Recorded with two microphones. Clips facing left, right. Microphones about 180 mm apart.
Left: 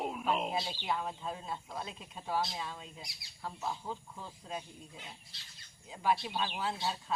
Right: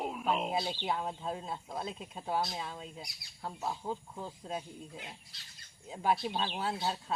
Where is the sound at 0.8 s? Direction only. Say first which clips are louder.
Right 1 dB; 25° right (ahead or behind).